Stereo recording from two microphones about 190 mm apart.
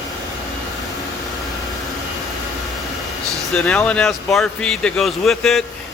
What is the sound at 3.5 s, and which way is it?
Speech, 5° left (ahead or behind).